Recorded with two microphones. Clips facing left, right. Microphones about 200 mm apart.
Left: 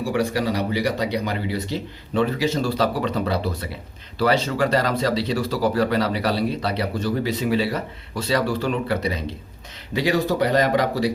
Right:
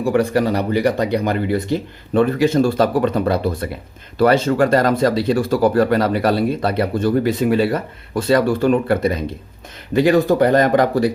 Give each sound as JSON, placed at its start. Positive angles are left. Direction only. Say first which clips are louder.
{"t": 0.0, "sound": "speech", "louder": "right 6 dB", "side_deg": -50}